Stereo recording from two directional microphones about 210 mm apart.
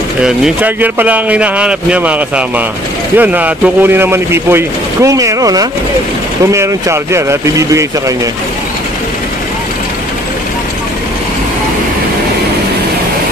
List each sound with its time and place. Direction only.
0.2 s a man's voice: 10° right (ahead or behind)